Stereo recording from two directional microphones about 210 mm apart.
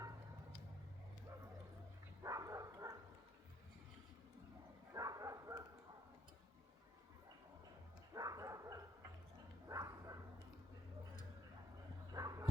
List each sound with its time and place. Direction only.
2.2 s a sound: 15° right (ahead or behind)
4.9 s bow-wow: 15° right (ahead or behind)
8.1 s dog: 15° right (ahead or behind)
9.6 s bow-wow: 15° right (ahead or behind)
12.1 s bow-wow: 15° right (ahead or behind)